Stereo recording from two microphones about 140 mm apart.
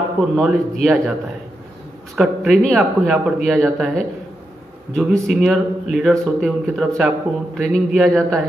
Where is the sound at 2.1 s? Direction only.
Centre (ahead or behind).